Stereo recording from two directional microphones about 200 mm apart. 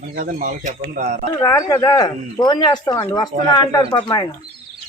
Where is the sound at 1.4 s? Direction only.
15° left (ahead or behind).